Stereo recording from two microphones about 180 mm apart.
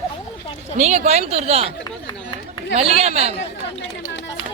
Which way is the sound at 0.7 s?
40° right (ahead or behind).